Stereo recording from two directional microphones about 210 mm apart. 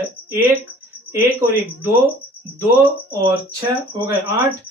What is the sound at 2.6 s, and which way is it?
Speech, 15° right (ahead or behind).